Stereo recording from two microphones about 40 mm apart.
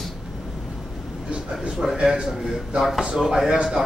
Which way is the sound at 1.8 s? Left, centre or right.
Centre.